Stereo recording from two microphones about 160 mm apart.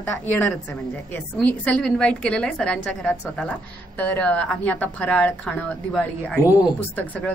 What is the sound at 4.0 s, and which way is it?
A woman's voice, 10° left (ahead or behind).